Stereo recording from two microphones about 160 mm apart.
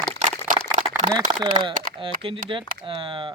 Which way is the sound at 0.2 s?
55° right (ahead or behind).